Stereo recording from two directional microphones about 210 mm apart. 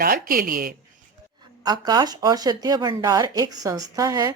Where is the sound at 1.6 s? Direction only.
20° right (ahead or behind).